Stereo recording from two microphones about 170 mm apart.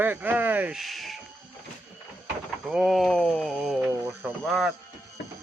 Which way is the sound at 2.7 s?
Centre (ahead or behind).